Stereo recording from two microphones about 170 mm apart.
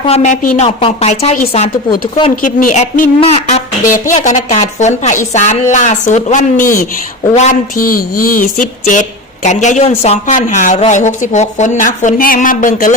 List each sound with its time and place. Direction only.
0.0 s a woman's voice: 40° left (ahead or behind)
2.3 s speech: 50° left (ahead or behind)
3.2 s a woman's voice: 35° left (ahead or behind)
4.1 s speech: 45° left (ahead or behind)